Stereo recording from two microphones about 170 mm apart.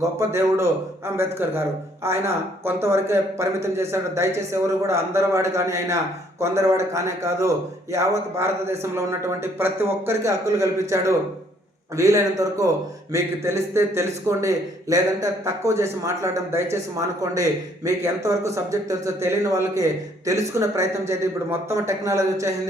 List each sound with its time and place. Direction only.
0.2 s a man's voice: 15° right (ahead or behind)
17.8 s a man's voice: 20° right (ahead or behind)